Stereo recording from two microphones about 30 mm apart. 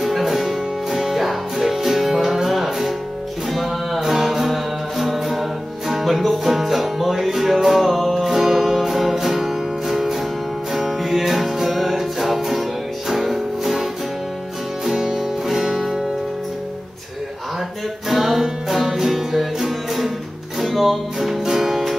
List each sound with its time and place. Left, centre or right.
0.0 s music: centre
14.9 s music: centre
18.0 s music: centre